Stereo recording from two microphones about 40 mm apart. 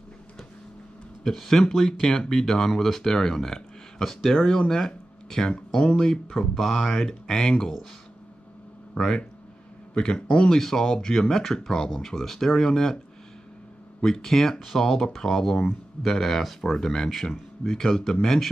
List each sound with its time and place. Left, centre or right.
1.2 s speech: centre
8.9 s a man's voice: centre
10.5 s speech: centre
14.0 s speech: centre